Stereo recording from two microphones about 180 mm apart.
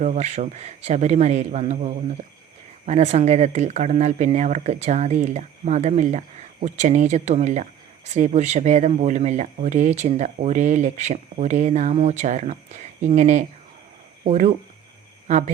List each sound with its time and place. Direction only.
0.0 s speech: 40° right (ahead or behind)